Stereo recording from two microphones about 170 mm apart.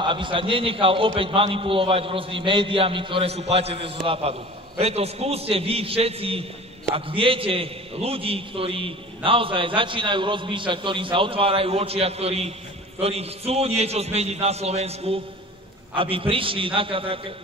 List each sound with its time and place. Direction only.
0.0 s a man's voice: 30° right (ahead or behind)